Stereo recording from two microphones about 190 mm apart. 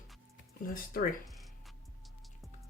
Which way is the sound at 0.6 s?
45° left (ahead or behind).